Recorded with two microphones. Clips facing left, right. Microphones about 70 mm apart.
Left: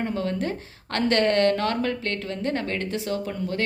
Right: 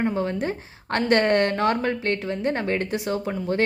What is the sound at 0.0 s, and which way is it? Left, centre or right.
A woman's voice, right.